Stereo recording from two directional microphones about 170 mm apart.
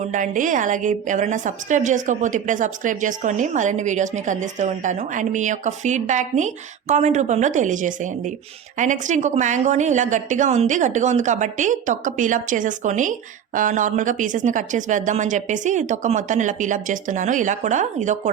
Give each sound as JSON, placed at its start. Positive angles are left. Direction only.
{"t": 0.0, "sound": "a woman's voice", "side_deg": -50}